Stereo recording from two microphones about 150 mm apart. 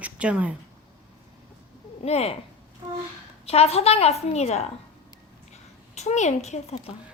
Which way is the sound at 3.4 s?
40° left (ahead or behind).